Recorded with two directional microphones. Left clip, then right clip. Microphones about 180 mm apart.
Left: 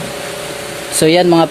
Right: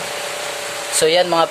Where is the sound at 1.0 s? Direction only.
15° left (ahead or behind).